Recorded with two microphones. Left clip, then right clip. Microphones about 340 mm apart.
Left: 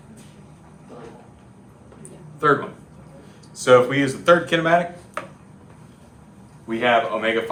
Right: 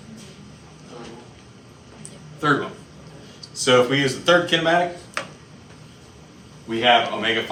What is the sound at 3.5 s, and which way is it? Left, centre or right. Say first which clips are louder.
Speech: left 2 dB; left.